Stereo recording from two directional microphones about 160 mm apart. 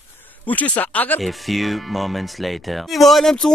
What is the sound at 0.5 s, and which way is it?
Speech, 10° left (ahead or behind).